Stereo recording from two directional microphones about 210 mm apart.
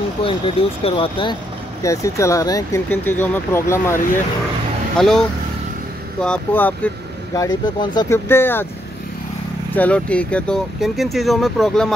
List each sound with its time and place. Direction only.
0.2 s speech: 25° left (ahead or behind)
1.8 s speech: 15° left (ahead or behind)
4.9 s speech: centre (ahead or behind)
6.2 s speech: 5° left (ahead or behind)
7.3 s speech: 20° left (ahead or behind)
9.8 s speech: 5° left (ahead or behind)